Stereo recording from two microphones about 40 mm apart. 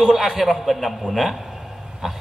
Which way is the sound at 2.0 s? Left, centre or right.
Centre.